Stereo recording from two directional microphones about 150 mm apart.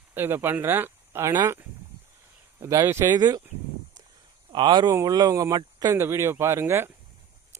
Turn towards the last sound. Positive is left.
turn(degrees=-15)  # may be behind; listen again after turning